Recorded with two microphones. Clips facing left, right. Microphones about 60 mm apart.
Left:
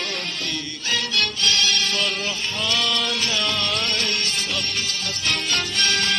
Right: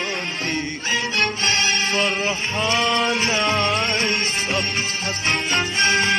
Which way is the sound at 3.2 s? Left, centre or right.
Right.